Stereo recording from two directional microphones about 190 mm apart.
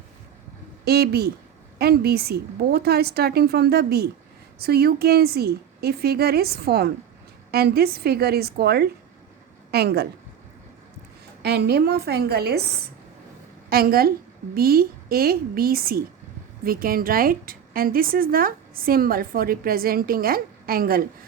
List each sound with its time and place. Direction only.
0.9 s a woman's voice: 55° right (ahead or behind)
11.4 s a woman's voice: 60° right (ahead or behind)
13.7 s a woman's voice: 50° right (ahead or behind)